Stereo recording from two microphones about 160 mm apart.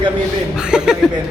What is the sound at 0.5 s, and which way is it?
Speech, 5° right (ahead or behind).